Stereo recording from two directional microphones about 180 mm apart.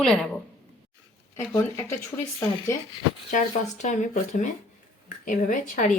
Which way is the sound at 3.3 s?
45° left (ahead or behind).